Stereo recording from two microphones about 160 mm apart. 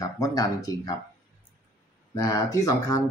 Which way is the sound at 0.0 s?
20° left (ahead or behind).